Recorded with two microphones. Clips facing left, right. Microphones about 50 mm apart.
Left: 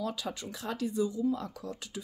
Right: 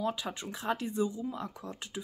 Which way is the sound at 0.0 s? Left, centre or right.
Right.